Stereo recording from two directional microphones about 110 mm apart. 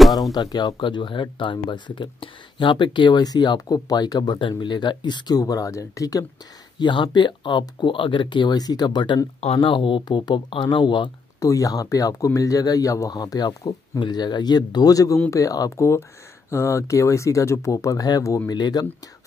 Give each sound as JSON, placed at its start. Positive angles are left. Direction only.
{"t": 0.1, "sound": "speech", "side_deg": 35}
{"t": 6.8, "sound": "speech", "side_deg": 45}
{"t": 9.4, "sound": "speech", "side_deg": 60}
{"t": 11.3, "sound": "speech", "side_deg": 30}
{"t": 13.9, "sound": "speech", "side_deg": 45}